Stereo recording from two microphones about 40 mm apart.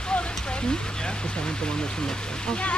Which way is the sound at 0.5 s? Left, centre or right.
Left.